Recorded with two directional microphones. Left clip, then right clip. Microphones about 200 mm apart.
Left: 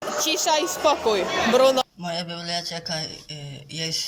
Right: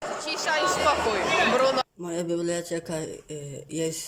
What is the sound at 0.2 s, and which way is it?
Speech, 15° left (ahead or behind).